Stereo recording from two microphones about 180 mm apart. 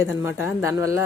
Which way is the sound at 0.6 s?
15° right (ahead or behind).